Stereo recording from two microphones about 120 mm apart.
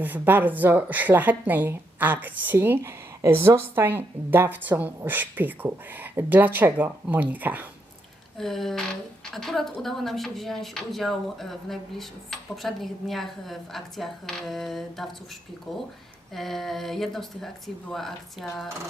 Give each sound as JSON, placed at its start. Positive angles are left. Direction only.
{"t": 0.0, "sound": "speech", "side_deg": -15}
{"t": 8.4, "sound": "speech", "side_deg": 0}